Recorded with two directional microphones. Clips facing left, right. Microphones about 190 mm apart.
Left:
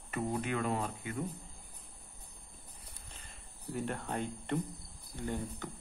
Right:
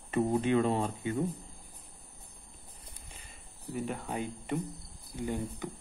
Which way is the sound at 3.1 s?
5° right (ahead or behind).